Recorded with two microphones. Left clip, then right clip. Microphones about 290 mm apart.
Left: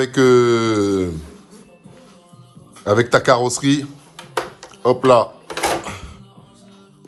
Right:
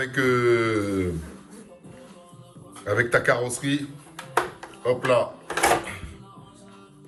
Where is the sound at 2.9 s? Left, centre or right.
Centre.